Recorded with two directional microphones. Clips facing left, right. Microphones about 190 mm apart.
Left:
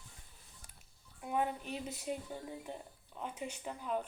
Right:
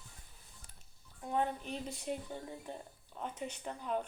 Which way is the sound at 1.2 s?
10° left (ahead or behind).